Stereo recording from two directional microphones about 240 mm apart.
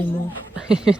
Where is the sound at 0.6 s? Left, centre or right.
Centre.